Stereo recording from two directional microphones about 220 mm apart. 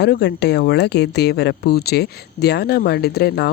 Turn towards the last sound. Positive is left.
turn(degrees=50)  # may be behind; listen again after turning